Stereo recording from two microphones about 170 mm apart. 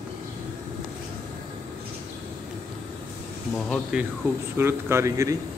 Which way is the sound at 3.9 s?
5° right (ahead or behind).